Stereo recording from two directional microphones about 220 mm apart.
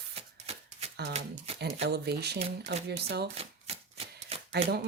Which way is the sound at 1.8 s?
50° right (ahead or behind).